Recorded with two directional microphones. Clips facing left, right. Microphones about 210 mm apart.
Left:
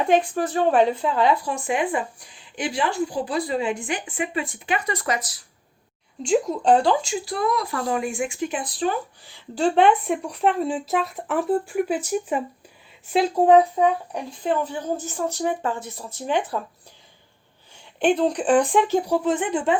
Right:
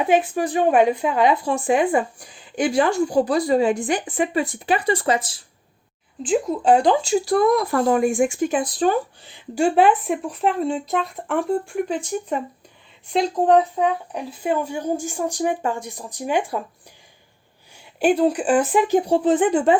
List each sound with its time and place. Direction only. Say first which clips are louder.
0.0 s speech: right 1 dB; 5° right (ahead or behind)
1.5 s a woman's voice: right 6 dB; 35° right (ahead or behind)
2.6 s a woman's voice: right 6 dB; 45° right (ahead or behind); by 5.4 s 30° right (ahead or behind)
6.2 s speech: right 1 dB; centre (ahead or behind)
7.0 s speech: right 8 dB; 40° right (ahead or behind)
9.2 s speech: even; 15° right (ahead or behind)
18.0 s speech: right 2 dB; 5° right (ahead or behind)
19.0 s a woman's voice: right 5 dB; 30° right (ahead or behind)